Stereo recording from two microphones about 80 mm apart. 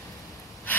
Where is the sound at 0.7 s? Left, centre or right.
Centre.